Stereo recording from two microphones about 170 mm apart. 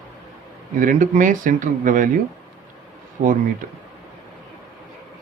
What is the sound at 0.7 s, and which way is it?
Speech, 50° right (ahead or behind).